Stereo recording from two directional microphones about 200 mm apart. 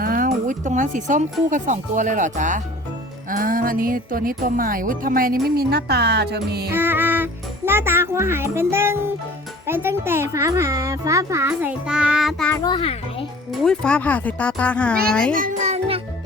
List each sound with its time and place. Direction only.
0.0 s speech: 45° right (ahead or behind)
6.7 s music: 10° right (ahead or behind)
9.6 s a child's voice: 10° right (ahead or behind)
12.6 s a child's voice: 25° left (ahead or behind)
13.5 s speech: centre (ahead or behind)
15.3 s music: 45° right (ahead or behind)